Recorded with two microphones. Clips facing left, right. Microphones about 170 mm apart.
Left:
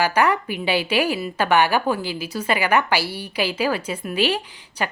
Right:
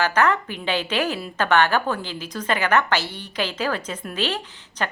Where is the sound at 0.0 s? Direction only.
10° left (ahead or behind).